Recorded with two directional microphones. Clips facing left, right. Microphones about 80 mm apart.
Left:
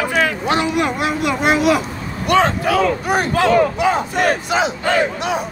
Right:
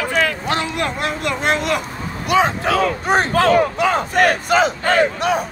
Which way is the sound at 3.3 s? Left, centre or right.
Right.